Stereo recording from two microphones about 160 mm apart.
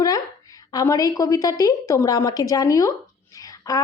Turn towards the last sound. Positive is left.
turn(degrees=20)  # may be behind; listen again after turning